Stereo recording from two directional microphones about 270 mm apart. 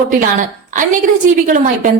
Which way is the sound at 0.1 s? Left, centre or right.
Right.